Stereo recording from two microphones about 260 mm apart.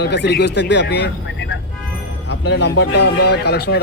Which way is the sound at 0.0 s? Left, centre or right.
Left.